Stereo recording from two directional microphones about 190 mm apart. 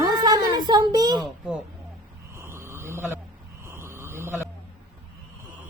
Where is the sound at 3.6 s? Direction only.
15° right (ahead or behind).